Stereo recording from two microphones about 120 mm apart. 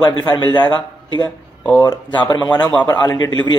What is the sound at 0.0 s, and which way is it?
Speech, 35° left (ahead or behind).